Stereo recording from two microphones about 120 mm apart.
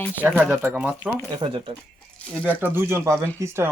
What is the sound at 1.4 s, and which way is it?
Speech, 45° right (ahead or behind).